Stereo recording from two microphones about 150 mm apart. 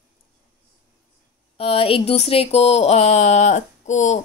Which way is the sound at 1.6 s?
40° left (ahead or behind).